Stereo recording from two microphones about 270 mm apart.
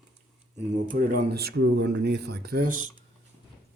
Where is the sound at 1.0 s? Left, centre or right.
Right.